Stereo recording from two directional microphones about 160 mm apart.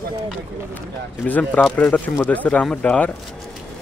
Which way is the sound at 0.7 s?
10° left (ahead or behind).